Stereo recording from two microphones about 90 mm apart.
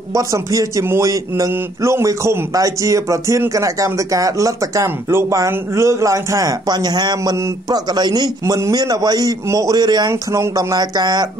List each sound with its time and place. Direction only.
0.1 s a man's voice: 40° right (ahead or behind)
6.7 s a man's voice: 50° right (ahead or behind)